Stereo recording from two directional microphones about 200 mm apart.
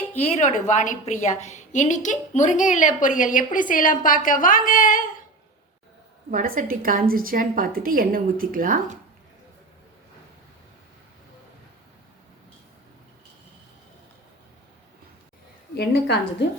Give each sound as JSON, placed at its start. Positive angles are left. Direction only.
{"t": 0.2, "sound": "a woman's voice", "side_deg": 35}
{"t": 6.3, "sound": "a woman's voice", "side_deg": -45}
{"t": 15.7, "sound": "a woman's voice", "side_deg": 55}